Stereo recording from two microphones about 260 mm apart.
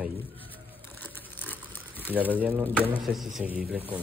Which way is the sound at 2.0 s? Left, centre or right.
Centre.